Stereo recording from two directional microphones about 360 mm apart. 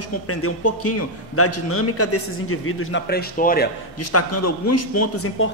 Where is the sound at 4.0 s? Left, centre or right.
Left.